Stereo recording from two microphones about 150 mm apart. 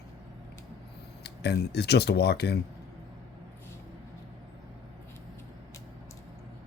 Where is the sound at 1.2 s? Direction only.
90° left.